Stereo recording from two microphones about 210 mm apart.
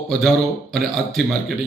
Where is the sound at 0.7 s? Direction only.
Centre (ahead or behind).